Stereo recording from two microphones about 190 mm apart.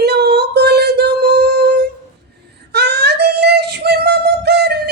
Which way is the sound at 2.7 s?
60° right (ahead or behind).